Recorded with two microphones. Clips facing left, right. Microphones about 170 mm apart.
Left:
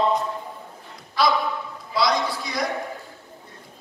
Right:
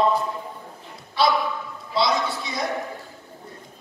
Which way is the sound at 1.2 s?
25° right (ahead or behind).